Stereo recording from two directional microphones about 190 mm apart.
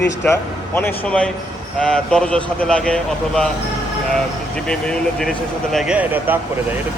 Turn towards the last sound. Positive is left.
turn(degrees=-10)  # may be behind; listen again after turning